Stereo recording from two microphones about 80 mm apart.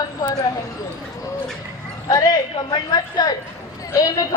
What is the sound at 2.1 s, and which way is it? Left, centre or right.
A man's voice, left.